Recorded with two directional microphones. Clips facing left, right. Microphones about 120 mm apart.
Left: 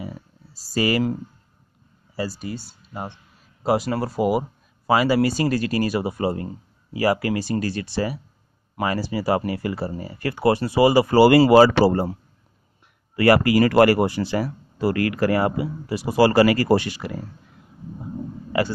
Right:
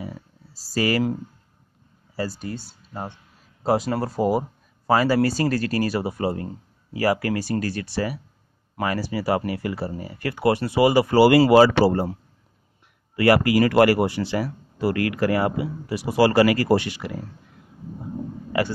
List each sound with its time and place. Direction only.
0.0 s a sound: 15° left (ahead or behind)
2.1 s speech: 10° left (ahead or behind); by 12.1 s 40° left (ahead or behind)
13.1 s speech: 40° left (ahead or behind)
18.5 s speech: 25° left (ahead or behind)